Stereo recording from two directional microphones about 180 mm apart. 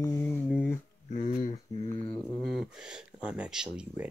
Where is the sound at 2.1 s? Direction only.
5° left (ahead or behind).